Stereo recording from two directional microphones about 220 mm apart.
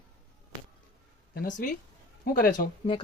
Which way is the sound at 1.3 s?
40° left (ahead or behind).